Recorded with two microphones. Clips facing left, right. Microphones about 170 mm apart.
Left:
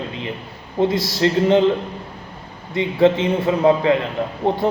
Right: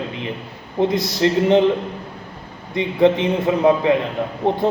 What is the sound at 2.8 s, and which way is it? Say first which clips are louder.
A man's voice: even; 20° right (ahead or behind).